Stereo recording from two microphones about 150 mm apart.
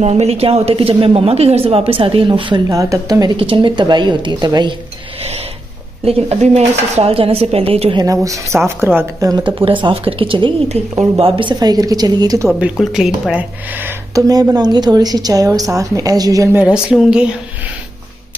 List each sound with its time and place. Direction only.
0.0 s a woman's voice: 45° right (ahead or behind); by 3.3 s 25° right (ahead or behind)
3.3 s a woman's voice: 35° right (ahead or behind)
6.0 s a woman's voice: 40° right (ahead or behind)
8.0 s speech: 20° right (ahead or behind)
9.6 s a woman's voice: 35° right (ahead or behind)
12.4 s speech: 10° right (ahead or behind)
16.6 s speech: 5° right (ahead or behind)